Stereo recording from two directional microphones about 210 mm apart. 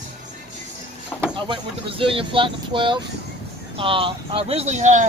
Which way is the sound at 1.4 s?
25° right (ahead or behind).